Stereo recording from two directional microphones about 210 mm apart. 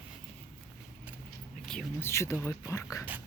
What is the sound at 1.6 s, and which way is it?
Speech, 5° left (ahead or behind).